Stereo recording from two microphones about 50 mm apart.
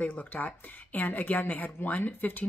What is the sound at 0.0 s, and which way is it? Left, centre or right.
Speech, left.